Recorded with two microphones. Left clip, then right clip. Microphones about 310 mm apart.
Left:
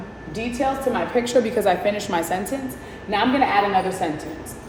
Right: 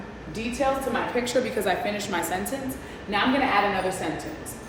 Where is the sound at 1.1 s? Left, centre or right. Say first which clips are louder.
Left 8 dB; centre.